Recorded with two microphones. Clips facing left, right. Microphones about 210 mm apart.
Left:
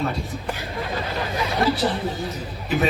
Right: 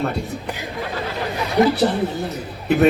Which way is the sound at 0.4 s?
15° right (ahead or behind).